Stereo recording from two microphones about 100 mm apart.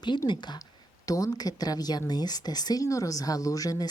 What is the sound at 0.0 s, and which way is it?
A woman's voice, 50° left (ahead or behind).